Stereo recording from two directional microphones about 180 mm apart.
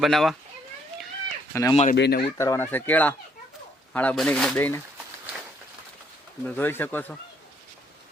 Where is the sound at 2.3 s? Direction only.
15° left (ahead or behind).